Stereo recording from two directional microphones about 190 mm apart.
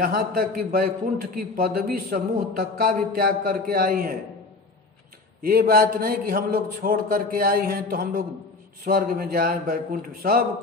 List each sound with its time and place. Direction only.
0.0 s a man's voice: 50° right (ahead or behind)
5.4 s a man's voice: 50° right (ahead or behind)